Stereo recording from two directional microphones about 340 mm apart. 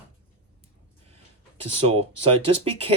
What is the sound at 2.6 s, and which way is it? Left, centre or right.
Speech, centre.